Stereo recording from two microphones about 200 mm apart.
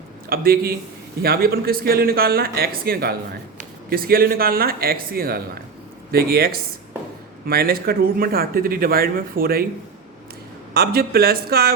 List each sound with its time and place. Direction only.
0.3 s speech: 50° right (ahead or behind)
10.8 s speech: 50° right (ahead or behind)